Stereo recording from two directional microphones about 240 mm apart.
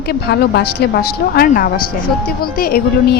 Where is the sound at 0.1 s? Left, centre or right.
Left.